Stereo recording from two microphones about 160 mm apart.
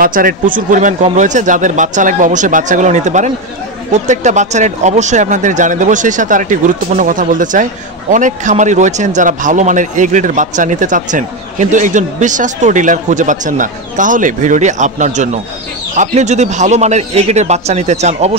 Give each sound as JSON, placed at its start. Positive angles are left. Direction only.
{"t": 0.0, "sound": "speech", "side_deg": -60}